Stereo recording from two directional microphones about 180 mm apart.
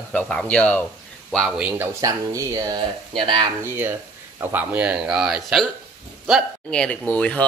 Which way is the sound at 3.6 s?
10° right (ahead or behind).